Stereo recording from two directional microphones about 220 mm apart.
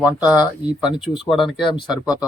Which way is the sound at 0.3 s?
5° right (ahead or behind).